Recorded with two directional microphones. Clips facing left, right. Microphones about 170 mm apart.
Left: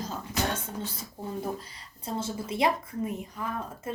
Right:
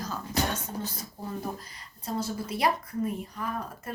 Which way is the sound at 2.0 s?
25° left (ahead or behind).